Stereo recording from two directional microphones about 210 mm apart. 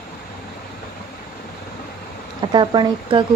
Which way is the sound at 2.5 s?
20° right (ahead or behind).